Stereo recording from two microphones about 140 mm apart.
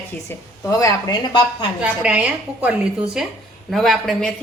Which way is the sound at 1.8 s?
10° right (ahead or behind).